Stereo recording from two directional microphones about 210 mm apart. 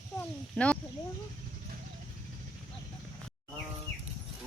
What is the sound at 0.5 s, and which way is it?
Speech, 5° left (ahead or behind).